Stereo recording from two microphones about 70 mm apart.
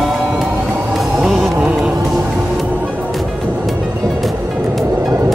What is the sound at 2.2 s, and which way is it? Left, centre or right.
Music, centre.